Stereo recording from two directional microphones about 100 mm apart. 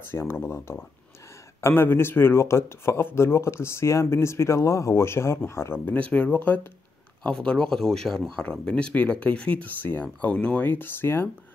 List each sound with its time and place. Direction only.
0.1 s speech: 25° left (ahead or behind)